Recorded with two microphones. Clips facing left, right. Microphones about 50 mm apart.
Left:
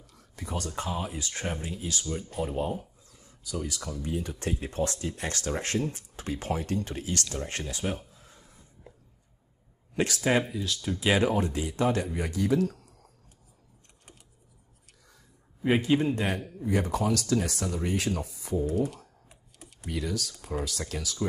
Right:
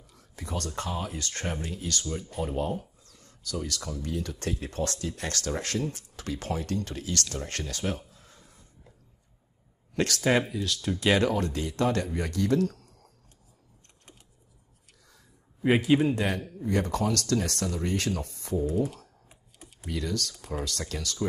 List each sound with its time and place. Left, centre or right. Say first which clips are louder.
0.1 s speech: even; centre
4.1 s speech: left 1 dB; left
8.1 s a sound: even; left
9.9 s speech: even; centre
10.2 s speech: right 1 dB; centre
15.6 s speech: right 2 dB; centre